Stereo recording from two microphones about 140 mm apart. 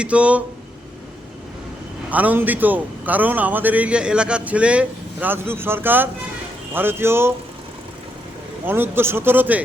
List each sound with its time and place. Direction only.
0.0 s a man's voice: 10° right (ahead or behind)
2.0 s a man's voice: 10° right (ahead or behind)
8.6 s a man's voice: 15° right (ahead or behind)